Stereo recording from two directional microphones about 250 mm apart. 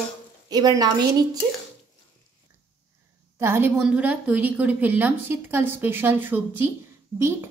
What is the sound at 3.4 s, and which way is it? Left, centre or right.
A woman's voice, centre.